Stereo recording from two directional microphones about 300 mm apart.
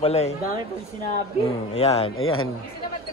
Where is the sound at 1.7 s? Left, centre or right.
Centre.